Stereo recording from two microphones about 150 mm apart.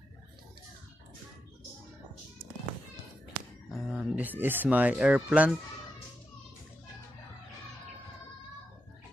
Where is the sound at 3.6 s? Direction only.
5° right (ahead or behind).